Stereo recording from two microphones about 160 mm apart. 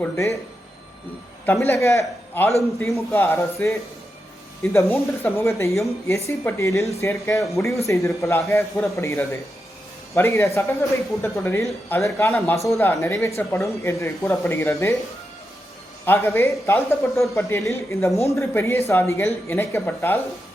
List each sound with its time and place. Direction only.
0.0 s speech: 15° left (ahead or behind)
1.6 s a man's voice: 15° left (ahead or behind)
16.0 s speech: 15° left (ahead or behind)